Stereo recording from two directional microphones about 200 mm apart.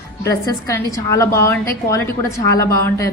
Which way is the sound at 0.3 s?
15° left (ahead or behind).